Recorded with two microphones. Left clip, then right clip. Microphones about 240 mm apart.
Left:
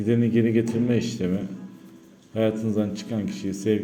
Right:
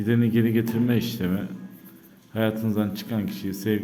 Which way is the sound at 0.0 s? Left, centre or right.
Centre.